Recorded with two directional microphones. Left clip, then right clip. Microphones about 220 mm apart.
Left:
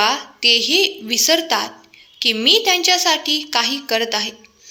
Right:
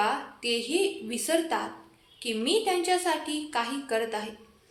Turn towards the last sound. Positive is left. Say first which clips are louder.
# left 10 dB
turn(degrees=35)  # may be behind; listen again after turning